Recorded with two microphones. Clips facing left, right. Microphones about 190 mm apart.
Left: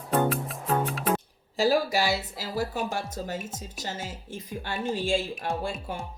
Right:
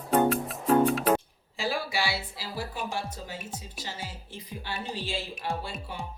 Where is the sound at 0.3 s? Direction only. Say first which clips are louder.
Right 3 dB; centre (ahead or behind).